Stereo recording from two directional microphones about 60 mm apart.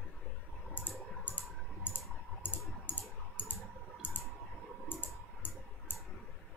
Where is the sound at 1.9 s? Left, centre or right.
Left.